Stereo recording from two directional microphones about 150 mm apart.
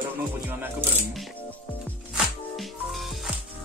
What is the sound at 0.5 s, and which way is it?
Insect, 15° right (ahead or behind).